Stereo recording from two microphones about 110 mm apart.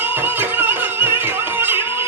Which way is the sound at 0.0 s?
20° right (ahead or behind).